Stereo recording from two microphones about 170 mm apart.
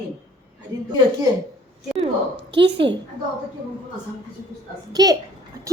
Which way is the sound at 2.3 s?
90° right.